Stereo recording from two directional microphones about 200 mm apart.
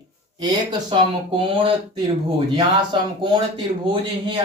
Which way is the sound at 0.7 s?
25° right (ahead or behind).